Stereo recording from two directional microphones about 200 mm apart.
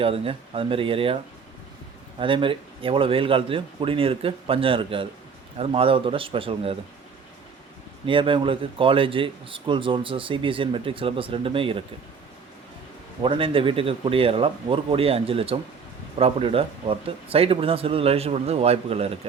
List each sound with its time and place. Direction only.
0.0 s a man's voice: 30° right (ahead or behind)
8.0 s a man's voice: 25° right (ahead or behind)
13.2 s a man's voice: 25° right (ahead or behind)